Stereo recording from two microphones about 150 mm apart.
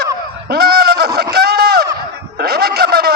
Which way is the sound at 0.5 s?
90° right.